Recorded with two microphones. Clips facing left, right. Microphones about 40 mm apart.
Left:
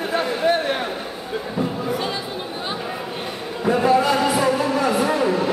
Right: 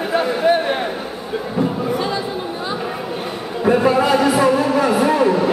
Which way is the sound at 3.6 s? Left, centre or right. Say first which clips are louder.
Right 2 dB; right.